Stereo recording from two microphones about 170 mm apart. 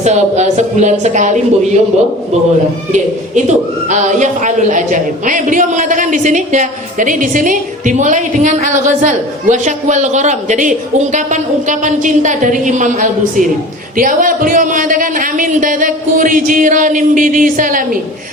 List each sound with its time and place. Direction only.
0.0 s a woman's voice: 40° right (ahead or behind)
2.9 s a woman's voice: 45° right (ahead or behind)